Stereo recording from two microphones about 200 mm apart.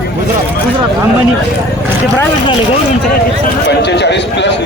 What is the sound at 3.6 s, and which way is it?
Speech, 60° left (ahead or behind).